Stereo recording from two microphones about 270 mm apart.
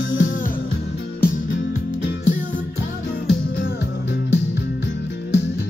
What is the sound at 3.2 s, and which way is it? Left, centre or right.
Music, left.